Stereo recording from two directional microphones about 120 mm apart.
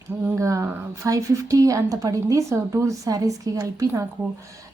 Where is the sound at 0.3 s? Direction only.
25° right (ahead or behind).